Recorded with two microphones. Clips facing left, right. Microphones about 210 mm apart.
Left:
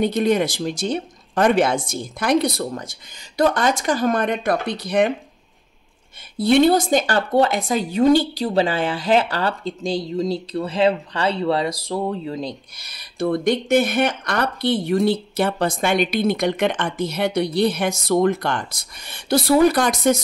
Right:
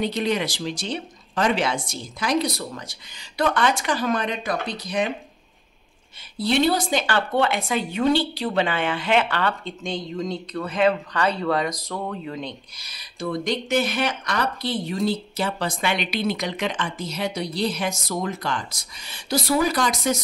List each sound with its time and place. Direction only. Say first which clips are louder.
0.0 s speech: left 5 dB; 50° left (ahead or behind)
2.7 s speech: left 6 dB; 40° left (ahead or behind); by 5.1 s 60° left (ahead or behind)
6.3 s a woman's voice: left 6 dB; 50° left (ahead or behind); by 12.5 s 35° left (ahead or behind)
12.7 s speech: left 9 dB; 55° left (ahead or behind)